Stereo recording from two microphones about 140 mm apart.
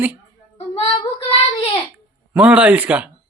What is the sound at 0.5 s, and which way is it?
Child singing, 45° left (ahead or behind).